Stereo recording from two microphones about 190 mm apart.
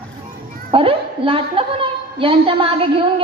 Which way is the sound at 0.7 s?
30° right (ahead or behind).